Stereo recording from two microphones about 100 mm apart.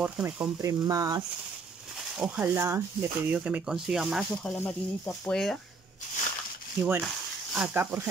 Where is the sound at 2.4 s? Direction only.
25° right (ahead or behind); by 5.6 s 5° left (ahead or behind).